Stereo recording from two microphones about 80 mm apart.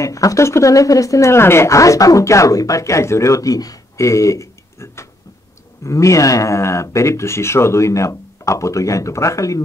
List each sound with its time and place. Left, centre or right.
0.0 s speech: left